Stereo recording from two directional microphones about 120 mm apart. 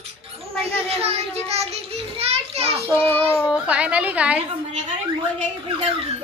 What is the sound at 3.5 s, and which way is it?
Speech, 10° right (ahead or behind).